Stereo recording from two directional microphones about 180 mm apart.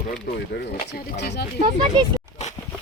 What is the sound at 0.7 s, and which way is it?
Speech, 65° left (ahead or behind).